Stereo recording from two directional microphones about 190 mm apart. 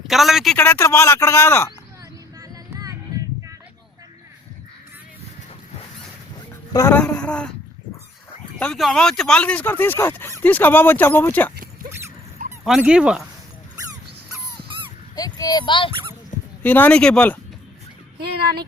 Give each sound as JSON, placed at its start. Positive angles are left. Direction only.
{"t": 0.1, "sound": "speech", "side_deg": 0}
{"t": 0.5, "sound": "speech", "side_deg": 10}
{"t": 2.4, "sound": "a sound", "side_deg": -20}
{"t": 6.7, "sound": "speech", "side_deg": 10}
{"t": 8.5, "sound": "speech", "side_deg": 5}
{"t": 11.5, "sound": "zipper", "side_deg": -50}
{"t": 12.6, "sound": "speech", "side_deg": -5}
{"t": 15.1, "sound": "speech", "side_deg": 20}
{"t": 16.3, "sound": "dog", "side_deg": 40}
{"t": 16.6, "sound": "speech", "side_deg": 10}
{"t": 18.2, "sound": "speech", "side_deg": -55}